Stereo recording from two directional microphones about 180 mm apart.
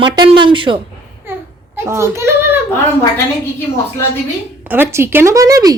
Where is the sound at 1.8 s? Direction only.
15° right (ahead or behind).